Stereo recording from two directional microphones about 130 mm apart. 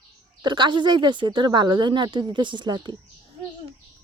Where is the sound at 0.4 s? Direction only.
35° right (ahead or behind).